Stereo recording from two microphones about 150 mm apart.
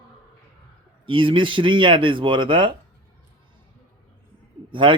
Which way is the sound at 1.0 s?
35° right (ahead or behind).